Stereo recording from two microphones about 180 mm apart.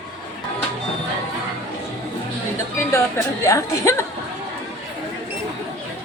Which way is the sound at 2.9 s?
15° left (ahead or behind).